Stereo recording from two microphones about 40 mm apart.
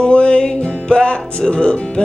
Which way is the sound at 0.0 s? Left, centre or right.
Left.